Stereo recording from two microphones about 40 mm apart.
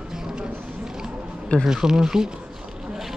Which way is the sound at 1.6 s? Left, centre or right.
Centre.